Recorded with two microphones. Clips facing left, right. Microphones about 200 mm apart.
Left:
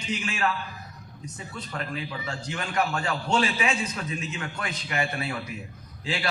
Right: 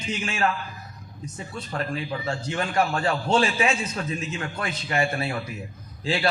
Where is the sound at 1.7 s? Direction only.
35° right (ahead or behind).